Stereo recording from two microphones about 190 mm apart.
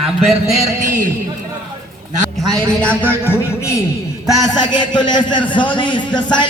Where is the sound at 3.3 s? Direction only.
15° left (ahead or behind).